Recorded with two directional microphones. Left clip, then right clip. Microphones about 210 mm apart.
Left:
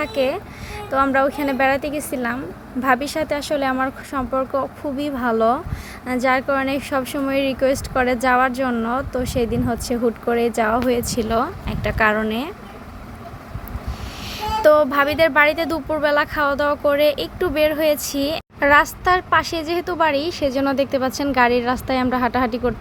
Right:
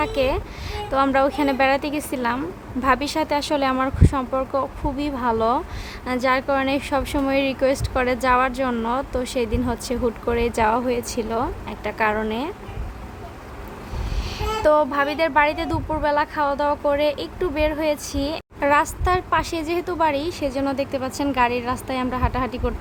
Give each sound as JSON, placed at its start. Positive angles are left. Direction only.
{"t": 0.0, "sound": "speech", "side_deg": 5}
{"t": 14.3, "sound": "a woman's voice", "side_deg": 10}